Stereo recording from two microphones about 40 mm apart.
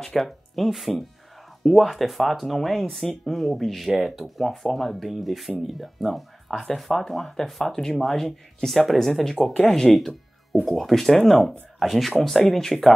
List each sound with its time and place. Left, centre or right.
0.0 s speech: centre
3.9 s speech: centre
4.7 s speech: centre